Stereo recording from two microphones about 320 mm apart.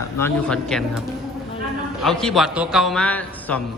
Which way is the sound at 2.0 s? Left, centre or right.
Centre.